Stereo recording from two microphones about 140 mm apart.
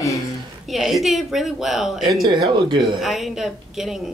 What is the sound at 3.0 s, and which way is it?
Speech, centre (ahead or behind).